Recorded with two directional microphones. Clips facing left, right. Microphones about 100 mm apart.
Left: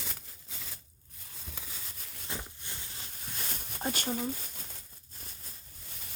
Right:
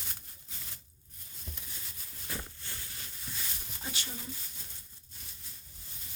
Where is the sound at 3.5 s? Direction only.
55° left (ahead or behind).